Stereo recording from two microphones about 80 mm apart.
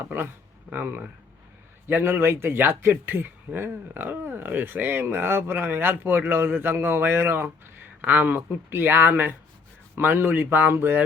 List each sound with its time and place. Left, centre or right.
0.7 s speech: right